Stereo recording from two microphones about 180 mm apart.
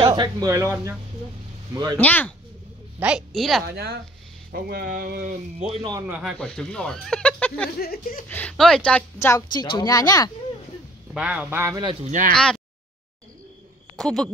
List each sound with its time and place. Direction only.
0.0 s speech: 25° right (ahead or behind)
2.0 s a woman's voice: 10° left (ahead or behind)
3.0 s speech: 5° right (ahead or behind)
3.6 s speech: 60° right (ahead or behind); by 5.9 s 35° right (ahead or behind)
6.0 s speech: 5° right (ahead or behind)
6.4 s speech: 5° left (ahead or behind)
7.8 s speech: 55° left (ahead or behind)
8.3 s a woman's voice: 5° left (ahead or behind)
11.1 s speech: 5° right (ahead or behind)
11.7 s speech: 25° right (ahead or behind)
12.1 s speech: 45° right (ahead or behind)
12.4 s a sound: 5° left (ahead or behind)
13.9 s speech: centre (ahead or behind)